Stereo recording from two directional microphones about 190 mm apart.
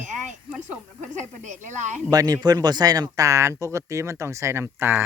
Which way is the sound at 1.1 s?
40° right (ahead or behind).